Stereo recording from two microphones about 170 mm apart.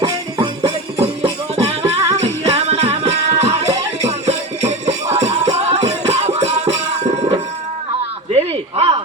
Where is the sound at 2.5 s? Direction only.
35° right (ahead or behind).